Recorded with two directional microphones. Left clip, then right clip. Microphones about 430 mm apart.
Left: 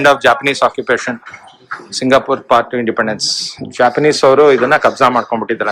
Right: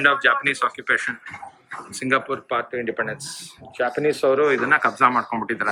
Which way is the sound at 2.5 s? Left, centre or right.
Left.